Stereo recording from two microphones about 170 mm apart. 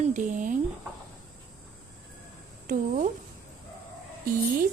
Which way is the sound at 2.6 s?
45° right (ahead or behind).